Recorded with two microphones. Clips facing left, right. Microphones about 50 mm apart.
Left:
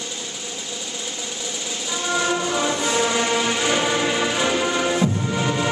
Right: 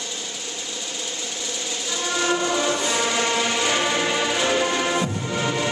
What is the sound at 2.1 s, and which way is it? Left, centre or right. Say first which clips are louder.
Music: even; centre.